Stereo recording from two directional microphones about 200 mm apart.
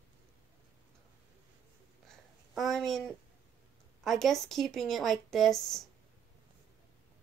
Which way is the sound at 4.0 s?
Centre (ahead or behind).